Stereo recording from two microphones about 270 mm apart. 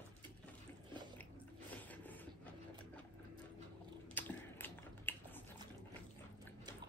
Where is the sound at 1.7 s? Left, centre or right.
Centre.